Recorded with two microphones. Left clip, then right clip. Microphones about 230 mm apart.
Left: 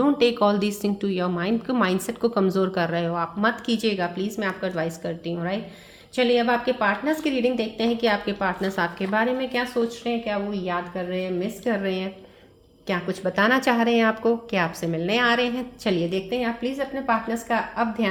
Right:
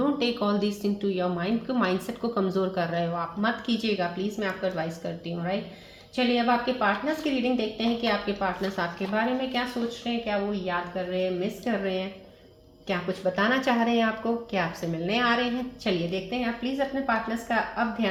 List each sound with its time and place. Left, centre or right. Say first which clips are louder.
0.0 s a woman's voice: left 7 dB; left